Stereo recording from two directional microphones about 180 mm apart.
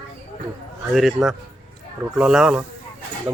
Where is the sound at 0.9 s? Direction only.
Centre (ahead or behind).